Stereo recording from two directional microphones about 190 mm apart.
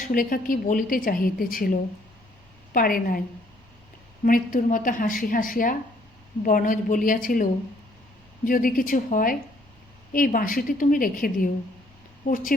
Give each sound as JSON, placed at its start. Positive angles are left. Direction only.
{"t": 0.0, "sound": "a woman's voice", "side_deg": 45}
{"t": 8.4, "sound": "a woman's voice", "side_deg": 50}